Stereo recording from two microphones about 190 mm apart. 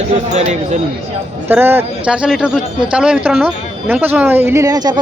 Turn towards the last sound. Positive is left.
turn(degrees=-20)  # may be behind; listen again after turning